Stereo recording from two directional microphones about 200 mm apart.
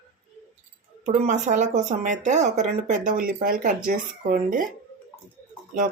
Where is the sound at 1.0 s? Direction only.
35° right (ahead or behind).